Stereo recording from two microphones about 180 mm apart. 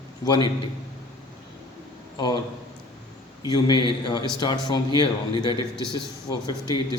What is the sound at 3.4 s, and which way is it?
A man's voice, 25° left (ahead or behind).